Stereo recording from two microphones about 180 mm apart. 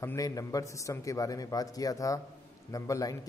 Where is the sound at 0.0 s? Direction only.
15° left (ahead or behind).